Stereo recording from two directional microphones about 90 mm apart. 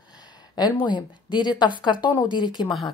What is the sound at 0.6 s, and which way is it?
Speech, 50° left (ahead or behind).